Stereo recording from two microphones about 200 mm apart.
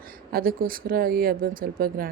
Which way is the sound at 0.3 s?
45° right (ahead or behind).